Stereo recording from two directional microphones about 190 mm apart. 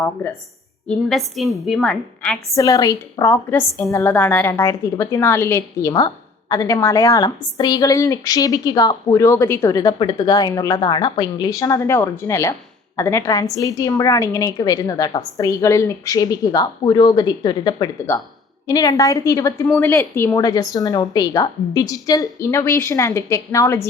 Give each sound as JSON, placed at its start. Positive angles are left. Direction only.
{"t": 0.9, "sound": "a woman's voice", "side_deg": 0}
{"t": 2.6, "sound": "a woman's voice", "side_deg": 20}